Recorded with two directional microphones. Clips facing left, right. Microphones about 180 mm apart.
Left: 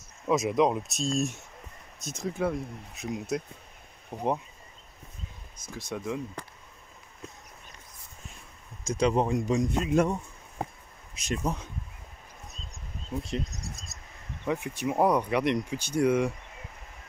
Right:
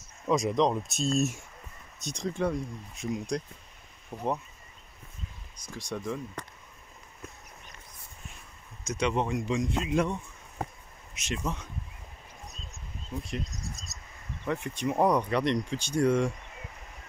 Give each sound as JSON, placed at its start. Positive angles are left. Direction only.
{"t": 0.3, "sound": "speech", "side_deg": 5}
{"t": 4.1, "sound": "speech", "side_deg": 15}
{"t": 5.7, "sound": "speech", "side_deg": 5}
{"t": 8.8, "sound": "speech", "side_deg": 35}
{"t": 11.1, "sound": "speech", "side_deg": 40}
{"t": 13.1, "sound": "speech", "side_deg": 25}
{"t": 14.4, "sound": "speech", "side_deg": 10}